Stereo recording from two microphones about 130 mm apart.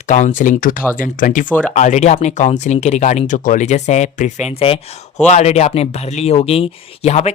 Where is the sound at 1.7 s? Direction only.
65° left (ahead or behind).